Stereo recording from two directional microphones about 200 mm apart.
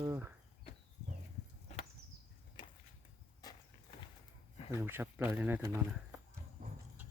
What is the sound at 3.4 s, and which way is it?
Horse, 20° left (ahead or behind).